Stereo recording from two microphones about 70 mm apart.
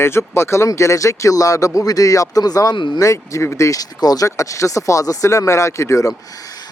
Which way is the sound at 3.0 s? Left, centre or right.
Left.